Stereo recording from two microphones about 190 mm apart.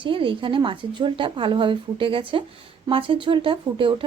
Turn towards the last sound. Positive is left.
turn(degrees=-25)  # may be behind; listen again after turning